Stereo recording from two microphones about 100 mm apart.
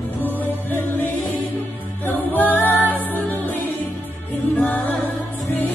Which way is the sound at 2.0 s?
20° left (ahead or behind).